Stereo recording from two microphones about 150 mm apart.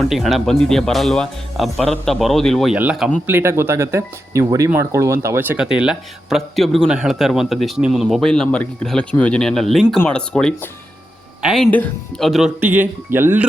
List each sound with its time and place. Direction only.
0.0 s a man's voice: centre (ahead or behind)
11.7 s speech: 10° left (ahead or behind)
12.5 s speech: 10° right (ahead or behind)